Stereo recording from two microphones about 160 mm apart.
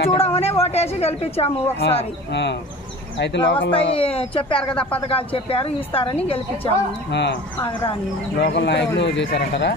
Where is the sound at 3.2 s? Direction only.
90° left.